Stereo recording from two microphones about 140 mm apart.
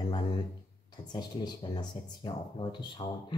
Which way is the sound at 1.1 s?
30° left (ahead or behind).